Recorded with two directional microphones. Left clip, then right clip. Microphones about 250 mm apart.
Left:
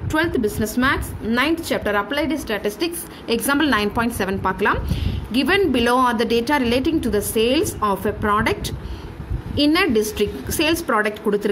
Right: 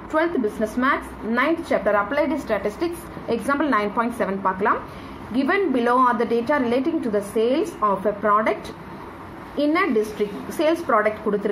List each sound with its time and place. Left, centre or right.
0.7 s a woman's voice: left
9.6 s a woman's voice: left